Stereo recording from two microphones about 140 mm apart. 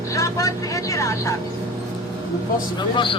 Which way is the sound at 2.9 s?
35° left (ahead or behind).